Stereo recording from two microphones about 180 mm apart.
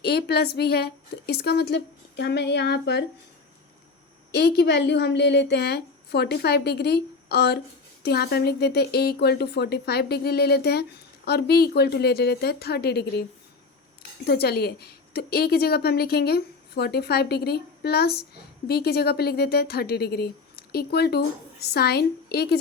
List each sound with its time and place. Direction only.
0.0 s a woman's voice: 60° left (ahead or behind)
4.3 s a woman's voice: 65° left (ahead or behind)
14.3 s a woman's voice: 60° left (ahead or behind)